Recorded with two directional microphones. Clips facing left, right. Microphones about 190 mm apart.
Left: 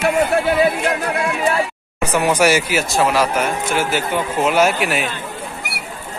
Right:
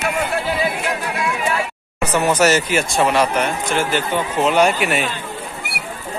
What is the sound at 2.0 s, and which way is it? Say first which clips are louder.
Speech: even; 10° left (ahead or behind).